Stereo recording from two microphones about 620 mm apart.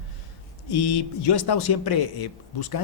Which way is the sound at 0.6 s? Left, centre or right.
Left.